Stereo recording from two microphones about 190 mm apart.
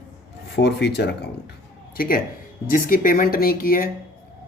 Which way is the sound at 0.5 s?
65° left (ahead or behind).